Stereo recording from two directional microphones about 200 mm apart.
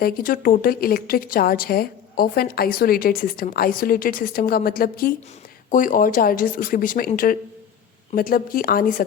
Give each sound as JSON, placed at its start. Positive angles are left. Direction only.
{"t": 0.0, "sound": "a woman's voice", "side_deg": 45}
{"t": 8.1, "sound": "a woman's voice", "side_deg": 45}